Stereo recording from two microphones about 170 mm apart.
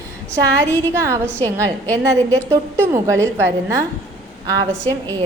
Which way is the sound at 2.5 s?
15° right (ahead or behind).